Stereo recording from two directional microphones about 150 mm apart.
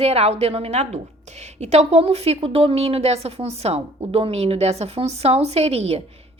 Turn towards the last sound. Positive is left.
turn(degrees=-40)  # may be behind; listen again after turning